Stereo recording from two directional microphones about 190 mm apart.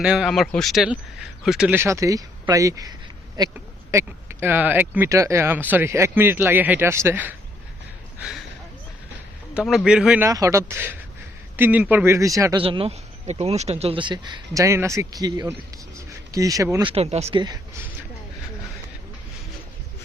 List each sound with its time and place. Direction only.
0.0 s speech: 5° right (ahead or behind)
9.6 s speech: 5° right (ahead or behind)
10.2 s speech: 15° right (ahead or behind)
12.6 s speech: 30° right (ahead or behind)
16.0 s a sound: 15° right (ahead or behind)
16.9 s speech: 35° right (ahead or behind)
17.3 s speech: 20° right (ahead or behind)